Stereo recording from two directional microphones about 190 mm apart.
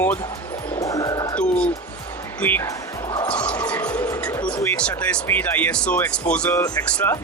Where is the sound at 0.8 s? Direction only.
15° left (ahead or behind).